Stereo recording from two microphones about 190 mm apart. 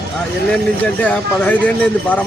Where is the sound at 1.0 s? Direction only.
5° left (ahead or behind).